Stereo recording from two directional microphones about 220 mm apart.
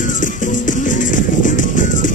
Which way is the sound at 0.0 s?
35° left (ahead or behind).